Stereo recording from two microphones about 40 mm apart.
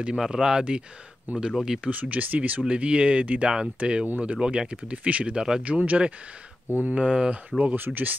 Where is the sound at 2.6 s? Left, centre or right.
Right.